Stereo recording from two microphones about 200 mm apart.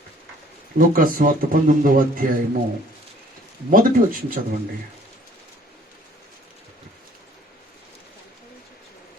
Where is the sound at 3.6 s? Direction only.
45° right (ahead or behind).